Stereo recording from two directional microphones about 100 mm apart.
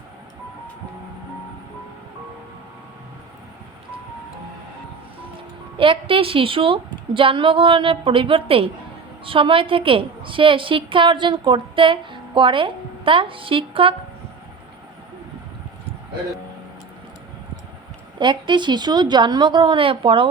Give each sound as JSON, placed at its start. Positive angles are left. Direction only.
{"t": 5.7, "sound": "a woman's voice", "side_deg": -60}
{"t": 18.2, "sound": "a woman's voice", "side_deg": -50}